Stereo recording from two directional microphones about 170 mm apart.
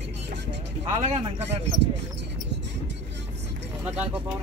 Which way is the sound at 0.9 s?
40° right (ahead or behind).